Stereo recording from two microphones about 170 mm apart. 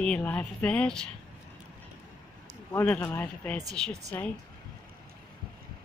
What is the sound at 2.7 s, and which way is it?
Speech, 15° left (ahead or behind).